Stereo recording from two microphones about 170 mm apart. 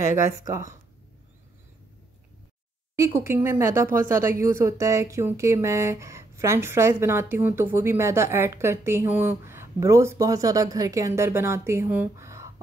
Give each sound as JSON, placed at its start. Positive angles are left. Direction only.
{"t": 0.1, "sound": "speech", "side_deg": -20}
{"t": 3.0, "sound": "speech", "side_deg": -15}